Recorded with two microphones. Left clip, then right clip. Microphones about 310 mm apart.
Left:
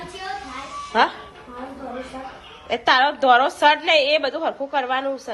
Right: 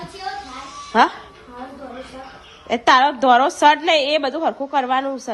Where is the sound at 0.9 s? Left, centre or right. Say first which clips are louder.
Right 3 dB; right.